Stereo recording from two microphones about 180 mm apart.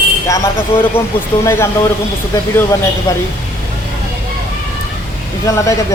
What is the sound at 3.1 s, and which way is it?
Speech, 15° left (ahead or behind).